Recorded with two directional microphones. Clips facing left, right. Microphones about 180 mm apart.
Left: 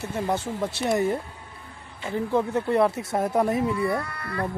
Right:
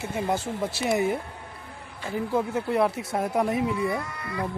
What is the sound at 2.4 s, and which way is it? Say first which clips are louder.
A man's voice: left 2 dB; 5° right (ahead or behind).